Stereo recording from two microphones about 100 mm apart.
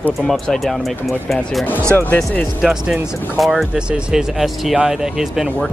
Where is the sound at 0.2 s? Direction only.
5° left (ahead or behind).